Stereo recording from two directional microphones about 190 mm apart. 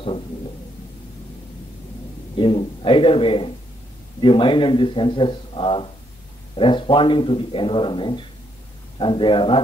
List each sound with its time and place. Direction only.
2.3 s speech: 30° left (ahead or behind)